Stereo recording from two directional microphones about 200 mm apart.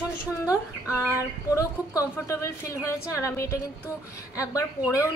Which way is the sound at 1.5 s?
15° left (ahead or behind).